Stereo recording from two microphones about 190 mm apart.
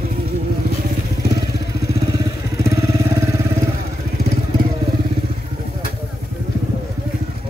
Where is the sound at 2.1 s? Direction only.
20° right (ahead or behind).